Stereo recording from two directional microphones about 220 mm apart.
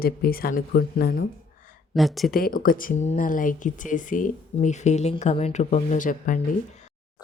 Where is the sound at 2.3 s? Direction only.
40° left (ahead or behind).